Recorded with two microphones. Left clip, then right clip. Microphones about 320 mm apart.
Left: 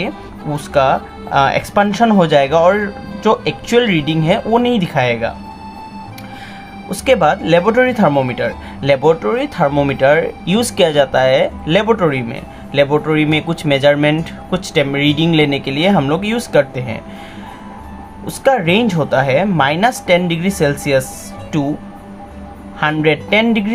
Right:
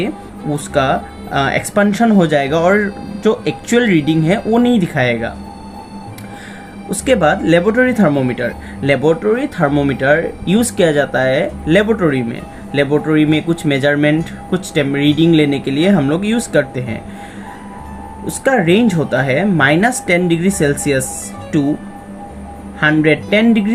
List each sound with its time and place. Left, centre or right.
0.5 s speech: centre
6.9 s speech: centre
18.3 s speech: centre
22.8 s speech: centre